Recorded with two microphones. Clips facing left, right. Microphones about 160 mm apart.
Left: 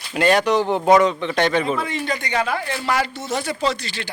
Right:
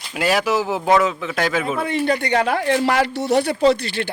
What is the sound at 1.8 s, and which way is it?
Speech, 60° right (ahead or behind).